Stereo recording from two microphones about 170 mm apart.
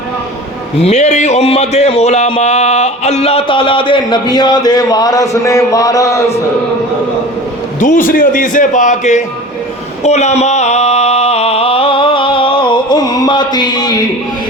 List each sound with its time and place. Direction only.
0.8 s speech: 40° left (ahead or behind); by 6.2 s 20° left (ahead or behind)
7.8 s a man's voice: 50° left (ahead or behind)
10.0 s a sound: 40° left (ahead or behind); by 14.0 s 25° left (ahead or behind)